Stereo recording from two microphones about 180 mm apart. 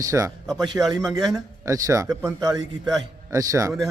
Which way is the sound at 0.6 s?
Centre (ahead or behind).